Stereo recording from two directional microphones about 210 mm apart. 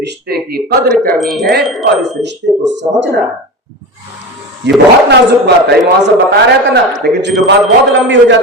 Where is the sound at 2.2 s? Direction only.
55° right (ahead or behind).